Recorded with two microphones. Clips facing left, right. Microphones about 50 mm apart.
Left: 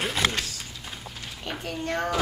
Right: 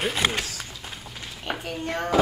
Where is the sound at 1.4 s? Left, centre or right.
Centre.